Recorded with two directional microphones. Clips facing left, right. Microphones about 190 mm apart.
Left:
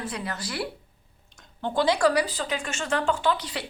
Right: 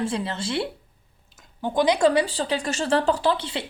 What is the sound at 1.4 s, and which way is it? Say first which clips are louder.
Speech: right 3 dB; 15° right (ahead or behind).